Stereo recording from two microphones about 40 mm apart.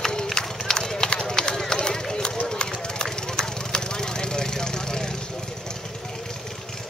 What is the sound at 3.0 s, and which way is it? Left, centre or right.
Vehicle, centre.